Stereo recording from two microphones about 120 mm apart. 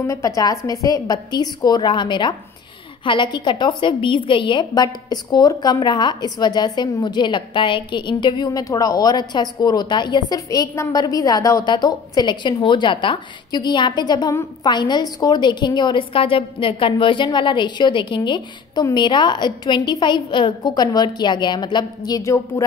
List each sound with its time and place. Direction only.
0.0 s a woman's voice: 25° left (ahead or behind)